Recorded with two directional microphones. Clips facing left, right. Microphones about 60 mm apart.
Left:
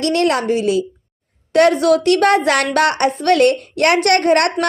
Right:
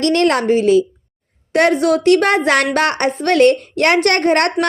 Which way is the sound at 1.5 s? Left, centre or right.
Right.